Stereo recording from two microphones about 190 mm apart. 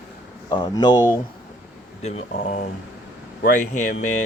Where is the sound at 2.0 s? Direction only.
35° left (ahead or behind).